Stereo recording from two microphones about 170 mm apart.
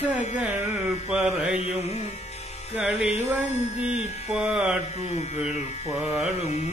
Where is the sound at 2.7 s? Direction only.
5° right (ahead or behind).